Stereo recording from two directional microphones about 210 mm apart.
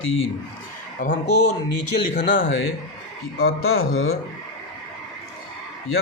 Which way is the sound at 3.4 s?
85° left.